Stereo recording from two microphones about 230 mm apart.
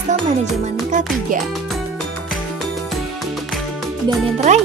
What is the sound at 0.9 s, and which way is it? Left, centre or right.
Music, right.